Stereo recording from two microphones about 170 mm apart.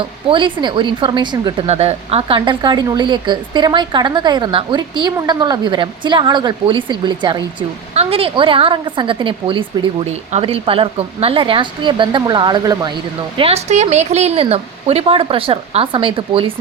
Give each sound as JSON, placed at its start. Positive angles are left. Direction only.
{"t": 0.0, "sound": "a woman's voice", "side_deg": -30}
{"t": 1.6, "sound": "a woman's voice", "side_deg": -40}